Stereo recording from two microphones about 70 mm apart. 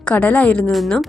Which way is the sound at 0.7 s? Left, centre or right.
Centre.